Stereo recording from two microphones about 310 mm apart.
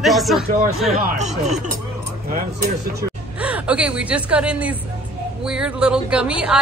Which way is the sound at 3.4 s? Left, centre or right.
Centre.